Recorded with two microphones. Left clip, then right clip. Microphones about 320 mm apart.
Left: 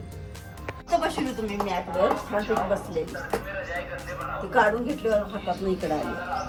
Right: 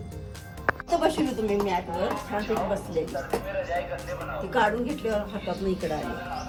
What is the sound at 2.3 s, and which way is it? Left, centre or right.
Speech, centre.